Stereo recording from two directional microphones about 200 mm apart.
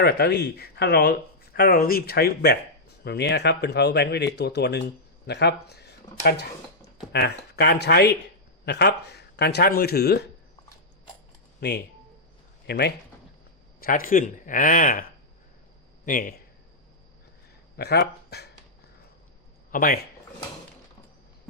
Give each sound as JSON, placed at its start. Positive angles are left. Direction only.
{"t": 0.0, "sound": "a man's voice", "side_deg": 50}
{"t": 12.6, "sound": "a man's voice", "side_deg": 55}
{"t": 16.0, "sound": "a man's voice", "side_deg": 45}
{"t": 17.7, "sound": "speech", "side_deg": 55}
{"t": 19.7, "sound": "a man's voice", "side_deg": 45}